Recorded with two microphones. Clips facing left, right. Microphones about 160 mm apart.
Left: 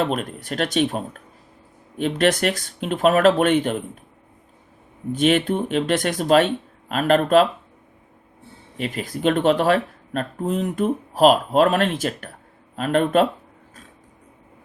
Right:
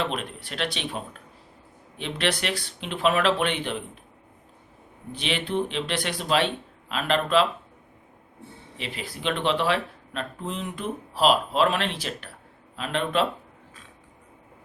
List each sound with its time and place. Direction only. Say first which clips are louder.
0.0 s speech: left 6 dB; 45° left (ahead or behind)
5.1 s speech: left 8 dB; 45° left (ahead or behind)
8.8 s speech: left 9 dB; 45° left (ahead or behind)